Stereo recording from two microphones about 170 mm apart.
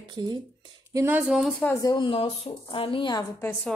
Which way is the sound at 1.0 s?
10° right (ahead or behind).